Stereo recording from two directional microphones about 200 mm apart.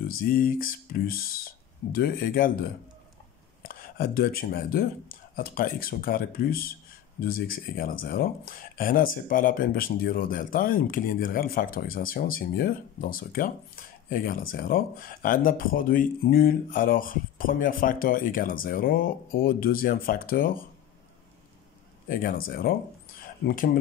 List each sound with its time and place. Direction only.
0.0 s speech: 45° left (ahead or behind)
22.0 s speech: 45° left (ahead or behind)